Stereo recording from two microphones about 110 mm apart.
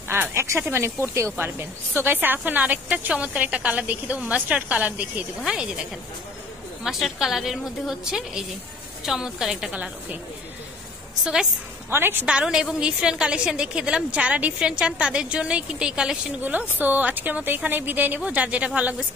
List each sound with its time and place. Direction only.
0.1 s a woman's voice: 20° right (ahead or behind)
11.9 s a woman's voice: 20° right (ahead or behind)
12.3 s a woman's voice: 5° right (ahead or behind)